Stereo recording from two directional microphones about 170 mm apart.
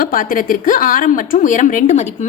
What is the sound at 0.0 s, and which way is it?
A woman's voice, 55° left (ahead or behind).